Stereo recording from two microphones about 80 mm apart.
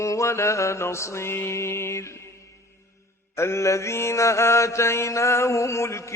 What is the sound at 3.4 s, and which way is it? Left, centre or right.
Mantra, left.